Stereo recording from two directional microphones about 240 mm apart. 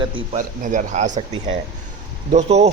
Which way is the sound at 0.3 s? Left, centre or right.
Right.